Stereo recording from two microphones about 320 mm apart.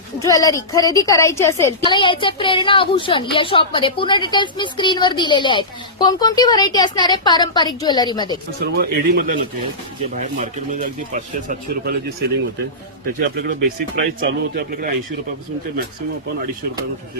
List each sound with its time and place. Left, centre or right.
0.2 s a woman's voice: centre
8.6 s speech: right
13.1 s speech: right